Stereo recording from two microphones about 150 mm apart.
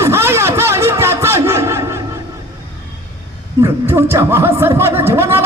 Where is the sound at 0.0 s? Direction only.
15° right (ahead or behind).